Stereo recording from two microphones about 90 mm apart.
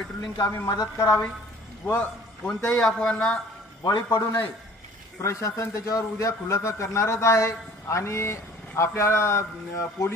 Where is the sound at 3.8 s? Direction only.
50° left (ahead or behind).